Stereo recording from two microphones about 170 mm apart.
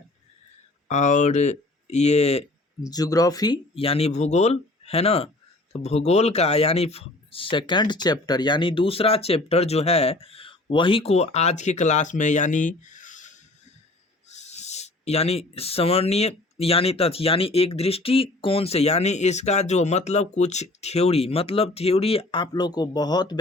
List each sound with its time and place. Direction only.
0.9 s speech: 45° left (ahead or behind)
2.8 s speech: 20° left (ahead or behind)